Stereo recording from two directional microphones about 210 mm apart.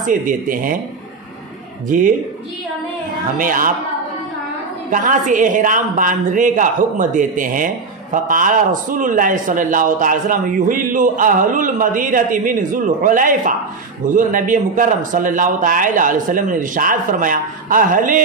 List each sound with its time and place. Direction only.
0.0 s a woman's voice: 40° right (ahead or behind)
1.9 s a woman's voice: 40° right (ahead or behind)
3.3 s a woman's voice: 40° right (ahead or behind)
4.9 s a woman's voice: 40° right (ahead or behind)